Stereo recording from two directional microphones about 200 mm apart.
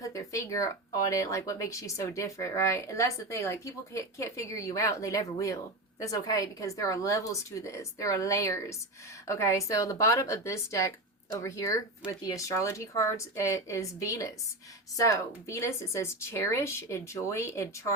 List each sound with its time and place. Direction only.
0.0 s speech: 15° left (ahead or behind)